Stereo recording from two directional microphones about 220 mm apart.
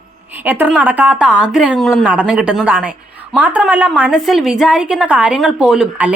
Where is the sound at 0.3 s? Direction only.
10° right (ahead or behind).